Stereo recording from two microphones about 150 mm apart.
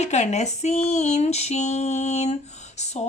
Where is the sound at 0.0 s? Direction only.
50° left (ahead or behind).